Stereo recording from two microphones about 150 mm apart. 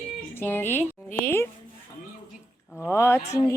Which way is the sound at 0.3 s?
15° left (ahead or behind).